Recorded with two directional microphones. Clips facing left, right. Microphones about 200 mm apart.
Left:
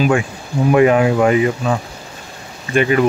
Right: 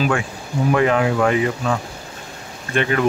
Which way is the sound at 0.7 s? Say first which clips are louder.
Left 5 dB; 15° left (ahead or behind).